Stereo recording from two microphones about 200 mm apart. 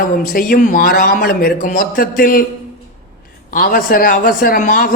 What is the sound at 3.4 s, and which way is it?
Speech, 45° left (ahead or behind).